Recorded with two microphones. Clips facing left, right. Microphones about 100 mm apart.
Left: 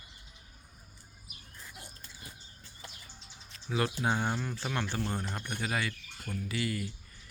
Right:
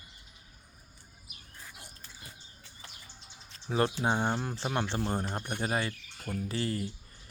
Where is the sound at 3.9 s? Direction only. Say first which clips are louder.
Right 2 dB; 25° right (ahead or behind).